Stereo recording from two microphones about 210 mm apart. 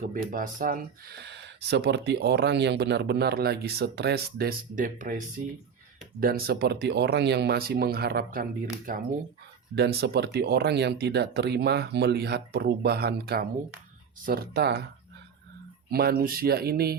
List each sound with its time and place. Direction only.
0.1 s speech: 40° right (ahead or behind)
9.7 s speech: 50° right (ahead or behind)
15.9 s speech: 45° right (ahead or behind)